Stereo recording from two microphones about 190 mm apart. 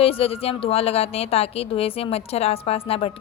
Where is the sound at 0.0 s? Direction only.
30° left (ahead or behind).